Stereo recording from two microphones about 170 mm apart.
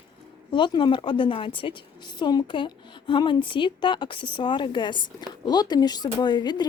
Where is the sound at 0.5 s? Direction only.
30° left (ahead or behind).